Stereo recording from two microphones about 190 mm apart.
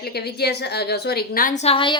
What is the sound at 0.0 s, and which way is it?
A woman's voice, 55° left (ahead or behind).